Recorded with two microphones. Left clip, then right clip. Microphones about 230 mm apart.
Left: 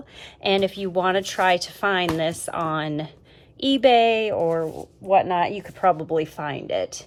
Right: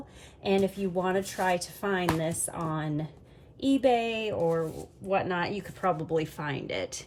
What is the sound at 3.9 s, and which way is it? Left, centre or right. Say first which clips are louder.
Speech: left 10 dB; centre.